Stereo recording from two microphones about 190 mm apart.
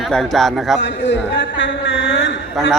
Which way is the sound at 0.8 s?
70° left (ahead or behind).